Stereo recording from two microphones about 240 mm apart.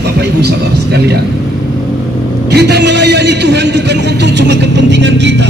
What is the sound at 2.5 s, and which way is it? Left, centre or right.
A man's voice, right.